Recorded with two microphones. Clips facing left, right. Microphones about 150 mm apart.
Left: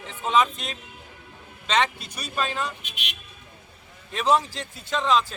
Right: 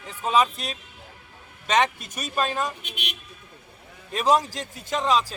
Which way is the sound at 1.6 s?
45° right (ahead or behind).